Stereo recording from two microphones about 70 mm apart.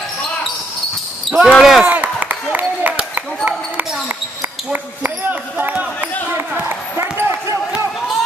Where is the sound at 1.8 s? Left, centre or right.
Right.